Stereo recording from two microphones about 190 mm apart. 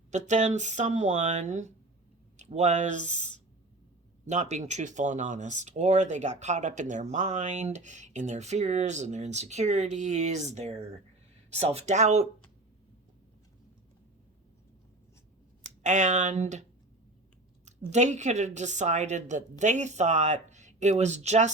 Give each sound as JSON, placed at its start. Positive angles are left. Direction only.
{"t": 0.1, "sound": "speech", "side_deg": -40}
{"t": 15.8, "sound": "speech", "side_deg": -40}
{"t": 17.7, "sound": "speech", "side_deg": -40}